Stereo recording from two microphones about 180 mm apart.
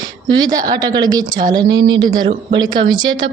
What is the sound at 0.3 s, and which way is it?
Speech, 20° right (ahead or behind).